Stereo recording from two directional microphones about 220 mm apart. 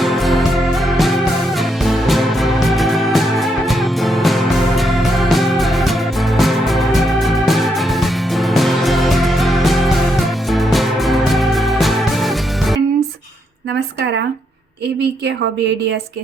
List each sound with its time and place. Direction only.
0.0 s music: centre (ahead or behind)